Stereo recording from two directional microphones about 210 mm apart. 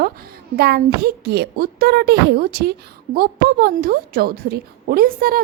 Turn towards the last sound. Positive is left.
turn(degrees=-45)  # may be behind; listen again after turning